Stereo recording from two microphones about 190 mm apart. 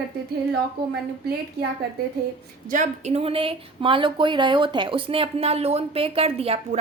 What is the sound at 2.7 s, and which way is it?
Speech, 40° right (ahead or behind).